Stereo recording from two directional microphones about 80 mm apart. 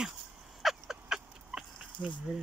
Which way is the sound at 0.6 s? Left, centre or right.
Centre.